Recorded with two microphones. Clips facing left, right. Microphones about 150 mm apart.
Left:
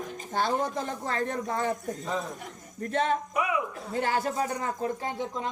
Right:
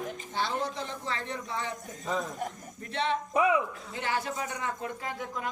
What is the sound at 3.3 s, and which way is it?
Speech, 25° right (ahead or behind).